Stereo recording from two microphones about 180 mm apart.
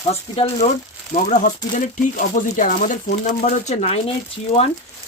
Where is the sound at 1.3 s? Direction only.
45° left (ahead or behind).